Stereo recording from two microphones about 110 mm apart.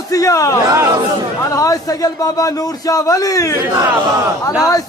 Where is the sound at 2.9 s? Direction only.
30° left (ahead or behind).